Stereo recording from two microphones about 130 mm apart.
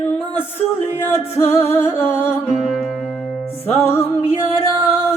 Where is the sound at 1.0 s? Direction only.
20° left (ahead or behind).